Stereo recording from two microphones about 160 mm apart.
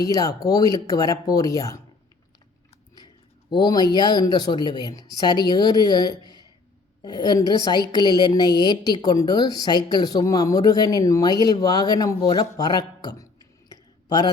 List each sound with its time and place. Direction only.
0.0 s a woman's voice: 20° left (ahead or behind)
3.5 s a woman's voice: 25° left (ahead or behind)
13.7 s a sound: 25° left (ahead or behind)